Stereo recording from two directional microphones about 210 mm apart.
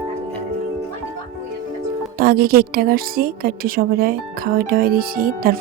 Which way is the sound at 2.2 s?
45° right (ahead or behind).